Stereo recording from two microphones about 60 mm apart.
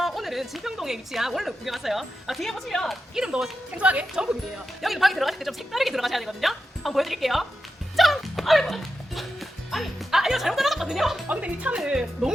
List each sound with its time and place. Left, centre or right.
0.0 s a woman's voice: centre
3.2 s speech: centre
4.1 s a woman's voice: centre
7.9 s music: centre
11.3 s speech: right
11.9 s speech: centre